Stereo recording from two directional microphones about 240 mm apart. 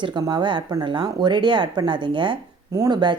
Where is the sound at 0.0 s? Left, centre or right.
Centre.